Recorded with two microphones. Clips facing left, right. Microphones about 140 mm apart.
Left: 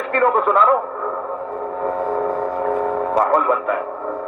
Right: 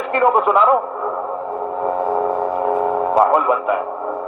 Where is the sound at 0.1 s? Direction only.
15° right (ahead or behind).